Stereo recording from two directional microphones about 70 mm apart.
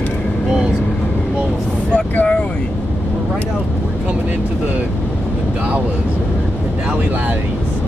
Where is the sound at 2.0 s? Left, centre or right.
Left.